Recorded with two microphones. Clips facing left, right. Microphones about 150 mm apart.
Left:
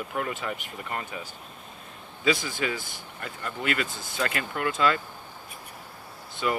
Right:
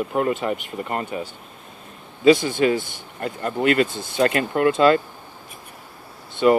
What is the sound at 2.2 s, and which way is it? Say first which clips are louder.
Speech: right 11 dB; 30° right (ahead or behind).